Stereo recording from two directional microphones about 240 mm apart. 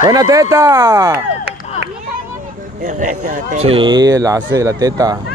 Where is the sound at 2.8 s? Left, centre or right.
Right; by 5.2 s centre.